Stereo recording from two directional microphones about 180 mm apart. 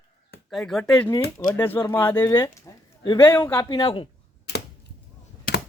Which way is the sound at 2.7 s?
15° left (ahead or behind).